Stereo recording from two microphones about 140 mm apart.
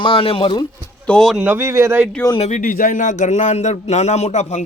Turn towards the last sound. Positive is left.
turn(degrees=55)  # may be behind; listen again after turning